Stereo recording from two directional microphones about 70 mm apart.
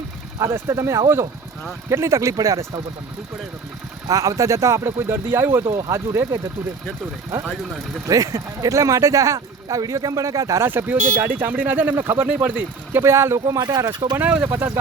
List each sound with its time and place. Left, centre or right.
0.3 s speech: right
4.1 s speech: right
8.0 s speech: right
10.6 s speech: right
12.3 s speech: right
13.0 s speech: right
13.6 s speech: right
14.2 s speech: right
14.4 s speech: right